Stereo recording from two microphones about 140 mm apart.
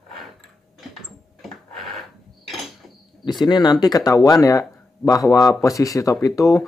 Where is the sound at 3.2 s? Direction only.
30° left (ahead or behind).